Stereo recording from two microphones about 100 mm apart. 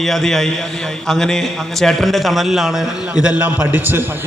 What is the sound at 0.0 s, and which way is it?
A man's voice, 5° left (ahead or behind).